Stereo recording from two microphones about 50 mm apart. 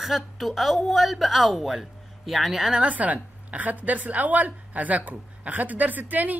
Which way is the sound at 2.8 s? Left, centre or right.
Right.